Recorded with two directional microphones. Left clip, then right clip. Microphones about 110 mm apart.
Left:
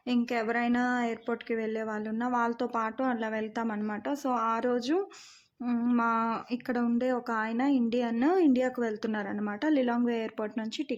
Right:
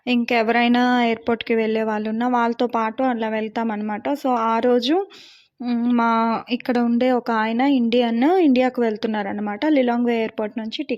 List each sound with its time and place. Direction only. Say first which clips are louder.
0.1 s speech: right 11 dB; 70° right (ahead or behind); by 10.2 s 55° right (ahead or behind)